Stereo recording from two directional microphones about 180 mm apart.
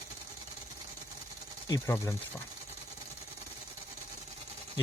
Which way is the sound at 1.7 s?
15° left (ahead or behind).